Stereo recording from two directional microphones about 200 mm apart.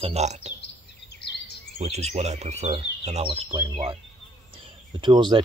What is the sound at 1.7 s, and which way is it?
Speech, 30° right (ahead or behind).